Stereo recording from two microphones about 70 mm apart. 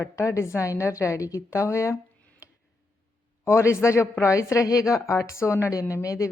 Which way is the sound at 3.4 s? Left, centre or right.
Left.